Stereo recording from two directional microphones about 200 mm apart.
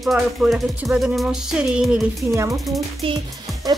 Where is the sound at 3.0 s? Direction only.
25° right (ahead or behind).